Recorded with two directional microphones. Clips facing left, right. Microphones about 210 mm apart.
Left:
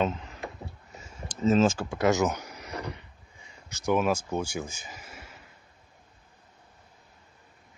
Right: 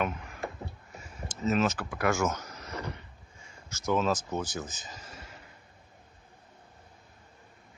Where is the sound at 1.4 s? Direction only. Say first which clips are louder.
Left 5 dB; 30° left (ahead or behind); by 5.2 s 10° left (ahead or behind).